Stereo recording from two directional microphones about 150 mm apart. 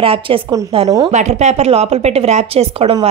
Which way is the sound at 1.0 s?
50° right (ahead or behind).